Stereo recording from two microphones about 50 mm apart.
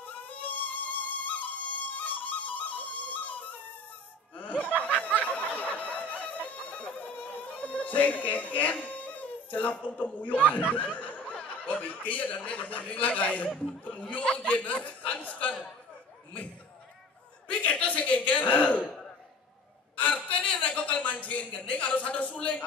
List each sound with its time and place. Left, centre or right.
0.0 s music: left
4.4 s snicker: left
4.6 s snicker: right
5.2 s music: left
11.0 s snicker: left
11.3 s speech: left
17.5 s a sound: left
20.0 s a sound: left